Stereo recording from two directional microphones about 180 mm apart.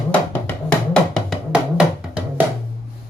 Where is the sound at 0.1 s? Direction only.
5° left (ahead or behind).